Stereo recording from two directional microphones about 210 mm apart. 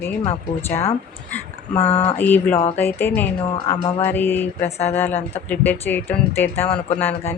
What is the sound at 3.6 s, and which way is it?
Music, 20° left (ahead or behind).